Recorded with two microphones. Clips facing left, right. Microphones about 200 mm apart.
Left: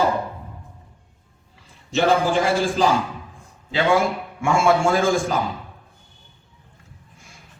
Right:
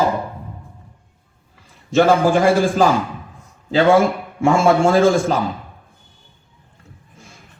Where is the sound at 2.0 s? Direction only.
50° right (ahead or behind).